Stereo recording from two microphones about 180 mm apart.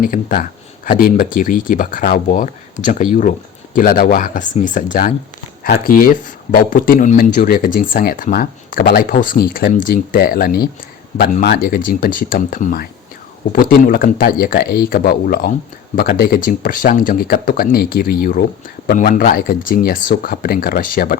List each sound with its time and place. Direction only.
0.0 s speech: 50° left (ahead or behind)
5.6 s speech: 60° left (ahead or behind)